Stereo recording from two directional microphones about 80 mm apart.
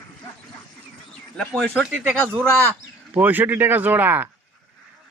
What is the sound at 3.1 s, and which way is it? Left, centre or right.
Speech, right.